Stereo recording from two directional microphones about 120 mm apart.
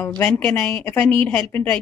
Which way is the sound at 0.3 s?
10° left (ahead or behind).